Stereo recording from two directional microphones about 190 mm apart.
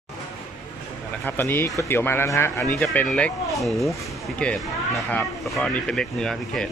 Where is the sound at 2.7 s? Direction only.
5° left (ahead or behind).